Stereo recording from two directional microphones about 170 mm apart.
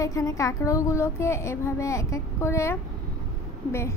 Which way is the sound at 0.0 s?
20° left (ahead or behind).